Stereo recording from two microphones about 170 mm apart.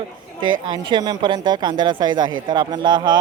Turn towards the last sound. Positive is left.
turn(degrees=-25)  # may be behind; listen again after turning